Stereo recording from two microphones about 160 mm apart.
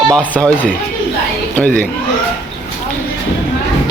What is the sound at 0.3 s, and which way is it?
Speech, 5° left (ahead or behind).